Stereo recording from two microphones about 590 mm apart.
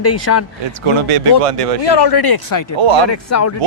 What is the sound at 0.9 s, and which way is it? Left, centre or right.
Speech, right.